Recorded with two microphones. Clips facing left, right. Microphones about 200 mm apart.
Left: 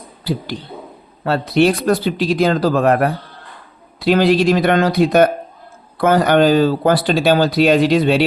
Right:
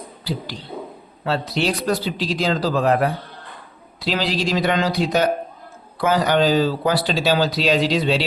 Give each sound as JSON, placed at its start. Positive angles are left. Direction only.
{"t": 1.2, "sound": "speech", "side_deg": 55}